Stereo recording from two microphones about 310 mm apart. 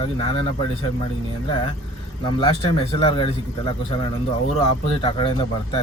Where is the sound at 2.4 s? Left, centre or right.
Centre.